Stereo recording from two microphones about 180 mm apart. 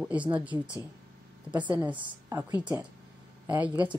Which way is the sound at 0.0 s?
5° right (ahead or behind).